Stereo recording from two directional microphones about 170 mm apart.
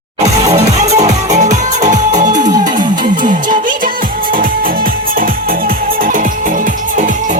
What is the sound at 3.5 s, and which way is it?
Music, 55° right (ahead or behind).